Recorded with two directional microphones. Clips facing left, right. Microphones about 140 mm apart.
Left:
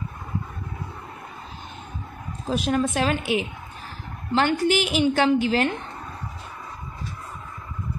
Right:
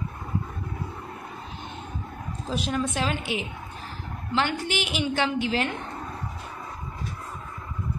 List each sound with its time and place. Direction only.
2.5 s a woman's voice: 50° left (ahead or behind)
4.3 s a woman's voice: 40° left (ahead or behind)